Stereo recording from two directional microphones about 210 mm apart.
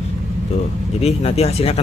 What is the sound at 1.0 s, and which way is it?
Speech, 30° left (ahead or behind).